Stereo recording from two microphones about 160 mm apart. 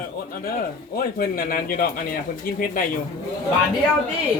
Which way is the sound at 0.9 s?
70° left (ahead or behind).